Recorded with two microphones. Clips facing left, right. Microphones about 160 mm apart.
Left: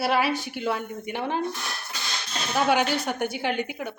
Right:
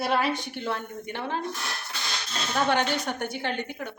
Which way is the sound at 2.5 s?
10° left (ahead or behind).